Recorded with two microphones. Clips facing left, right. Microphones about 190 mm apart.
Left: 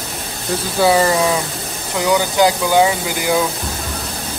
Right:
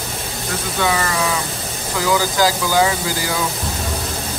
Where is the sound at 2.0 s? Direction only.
20° left (ahead or behind).